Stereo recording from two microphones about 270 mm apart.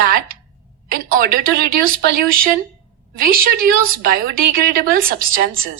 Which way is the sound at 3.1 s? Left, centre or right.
Right.